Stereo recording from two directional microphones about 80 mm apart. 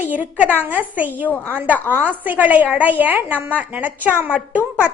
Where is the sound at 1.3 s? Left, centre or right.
Left.